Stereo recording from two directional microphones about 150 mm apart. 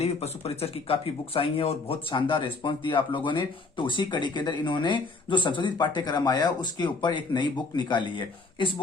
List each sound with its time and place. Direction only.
0.0 s speech: 45° left (ahead or behind)